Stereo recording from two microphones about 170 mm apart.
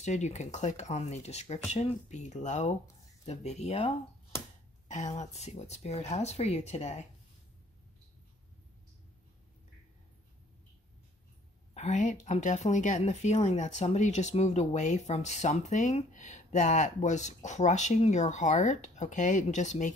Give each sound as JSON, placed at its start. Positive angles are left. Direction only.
{"t": 0.0, "sound": "speech", "side_deg": 40}
{"t": 11.7, "sound": "speech", "side_deg": 45}